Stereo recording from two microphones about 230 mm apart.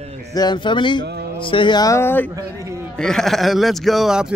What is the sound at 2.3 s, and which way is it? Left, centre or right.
Speech, centre.